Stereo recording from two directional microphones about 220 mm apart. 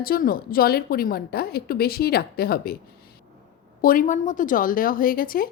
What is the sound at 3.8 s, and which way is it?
A woman's voice, 40° left (ahead or behind).